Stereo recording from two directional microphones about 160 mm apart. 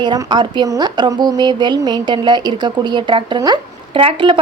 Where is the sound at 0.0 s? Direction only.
25° right (ahead or behind).